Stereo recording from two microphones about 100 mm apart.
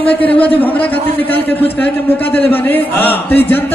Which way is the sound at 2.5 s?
20° left (ahead or behind).